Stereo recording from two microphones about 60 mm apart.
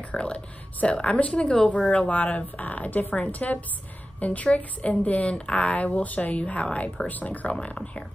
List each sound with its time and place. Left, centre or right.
0.1 s a woman's voice: centre